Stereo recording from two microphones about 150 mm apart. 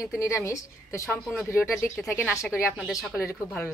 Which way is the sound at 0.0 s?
20° left (ahead or behind).